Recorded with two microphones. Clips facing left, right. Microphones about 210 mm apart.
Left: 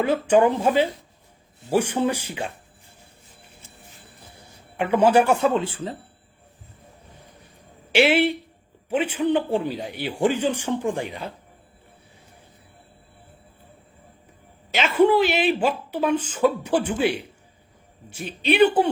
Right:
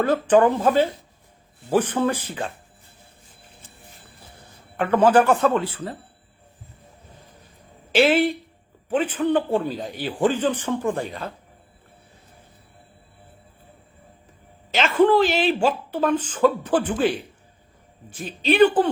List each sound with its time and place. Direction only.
0.0 s a woman's voice: 10° left (ahead or behind)
4.4 s a man's voice: 10° left (ahead or behind)
5.5 s speech: 20° left (ahead or behind)
7.9 s a woman's voice: 10° left (ahead or behind)
14.8 s a woman's voice: 10° left (ahead or behind)